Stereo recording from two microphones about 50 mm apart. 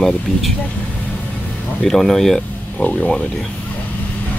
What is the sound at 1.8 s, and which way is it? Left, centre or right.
Speech, centre.